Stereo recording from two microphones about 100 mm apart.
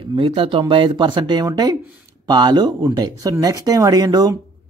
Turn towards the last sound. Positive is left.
turn(degrees=-45)  # may be behind; listen again after turning